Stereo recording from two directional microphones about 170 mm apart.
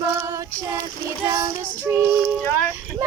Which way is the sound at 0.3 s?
20° right (ahead or behind).